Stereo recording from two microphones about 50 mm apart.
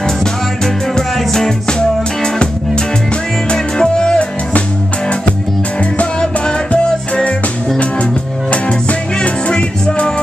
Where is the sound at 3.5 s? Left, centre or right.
Centre.